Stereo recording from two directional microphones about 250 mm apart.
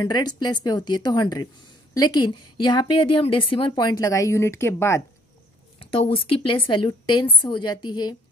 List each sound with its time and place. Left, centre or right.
0.0 s speech: centre
5.8 s speech: left